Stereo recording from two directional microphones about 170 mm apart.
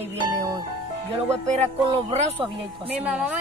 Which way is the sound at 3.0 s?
10° right (ahead or behind).